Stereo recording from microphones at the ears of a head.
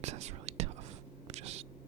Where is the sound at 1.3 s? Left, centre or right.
Right.